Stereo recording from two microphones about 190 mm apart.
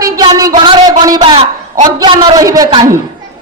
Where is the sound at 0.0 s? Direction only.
20° right (ahead or behind).